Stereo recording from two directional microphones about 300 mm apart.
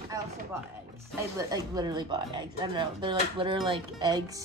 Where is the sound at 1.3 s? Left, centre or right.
Centre.